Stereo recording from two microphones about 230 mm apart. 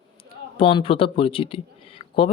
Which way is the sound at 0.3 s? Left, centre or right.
Left.